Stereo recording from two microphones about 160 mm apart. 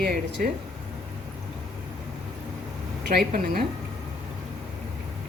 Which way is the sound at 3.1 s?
80° right.